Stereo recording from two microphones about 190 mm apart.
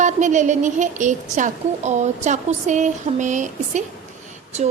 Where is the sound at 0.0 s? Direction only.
40° right (ahead or behind).